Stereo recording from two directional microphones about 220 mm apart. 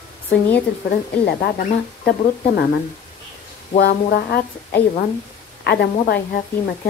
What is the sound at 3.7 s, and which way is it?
A woman's voice, 45° left (ahead or behind).